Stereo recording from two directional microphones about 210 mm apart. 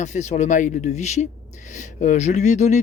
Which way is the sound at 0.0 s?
35° left (ahead or behind).